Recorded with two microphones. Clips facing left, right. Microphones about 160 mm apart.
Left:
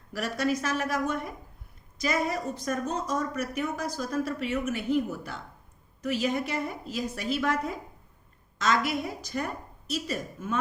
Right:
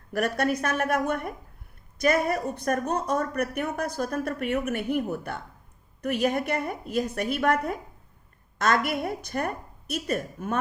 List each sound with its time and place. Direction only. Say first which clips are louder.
0.1 s speech: right 3 dB; 60° right (ahead or behind)